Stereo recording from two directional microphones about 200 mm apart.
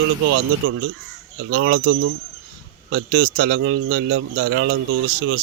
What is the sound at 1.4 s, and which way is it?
A man's voice, 60° right (ahead or behind).